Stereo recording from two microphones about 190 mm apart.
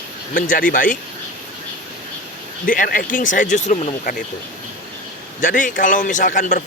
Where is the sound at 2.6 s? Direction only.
45° left (ahead or behind).